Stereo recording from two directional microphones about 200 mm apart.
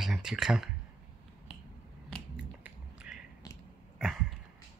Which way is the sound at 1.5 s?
5° right (ahead or behind).